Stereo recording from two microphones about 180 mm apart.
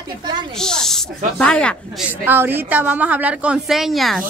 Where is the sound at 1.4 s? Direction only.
5° left (ahead or behind).